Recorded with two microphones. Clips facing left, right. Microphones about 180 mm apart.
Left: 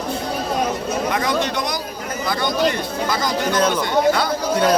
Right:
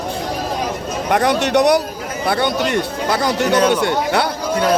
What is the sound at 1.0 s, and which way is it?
Speech, 65° right (ahead or behind).